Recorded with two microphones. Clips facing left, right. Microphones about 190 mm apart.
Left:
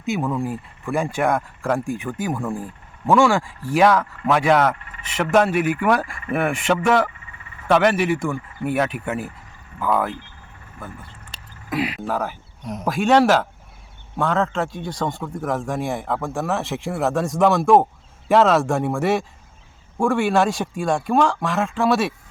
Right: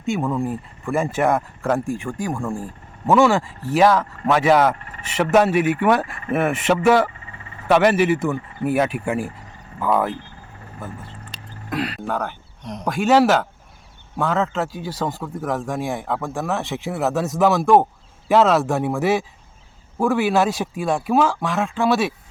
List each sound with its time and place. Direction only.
0.0 s a man's voice: centre (ahead or behind)
4.7 s vehicle: 40° right (ahead or behind)
5.1 s a man's voice: 5° right (ahead or behind)
7.1 s vehicle: 35° right (ahead or behind)
7.7 s a man's voice: 5° right (ahead or behind)
11.7 s a man's voice: 10° left (ahead or behind)